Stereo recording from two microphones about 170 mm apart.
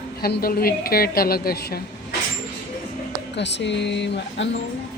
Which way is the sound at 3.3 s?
90° left.